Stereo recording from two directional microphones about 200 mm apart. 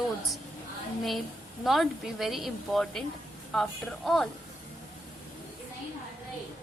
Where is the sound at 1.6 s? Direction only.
Centre (ahead or behind).